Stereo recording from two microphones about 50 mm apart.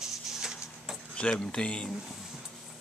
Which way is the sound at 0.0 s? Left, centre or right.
Centre.